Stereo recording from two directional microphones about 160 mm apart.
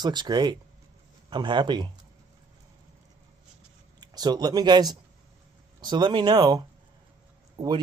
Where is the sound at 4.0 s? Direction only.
25° right (ahead or behind).